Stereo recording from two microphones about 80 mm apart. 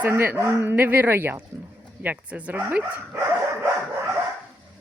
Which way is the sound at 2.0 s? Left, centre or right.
Centre.